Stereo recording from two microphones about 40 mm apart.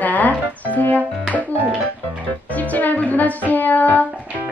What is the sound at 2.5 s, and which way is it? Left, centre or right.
Music, left.